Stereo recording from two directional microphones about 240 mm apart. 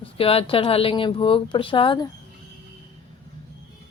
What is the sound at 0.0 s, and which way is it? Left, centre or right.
Speech, left.